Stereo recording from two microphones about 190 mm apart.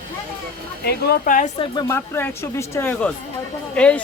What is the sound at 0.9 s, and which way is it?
Speech, 55° left (ahead or behind).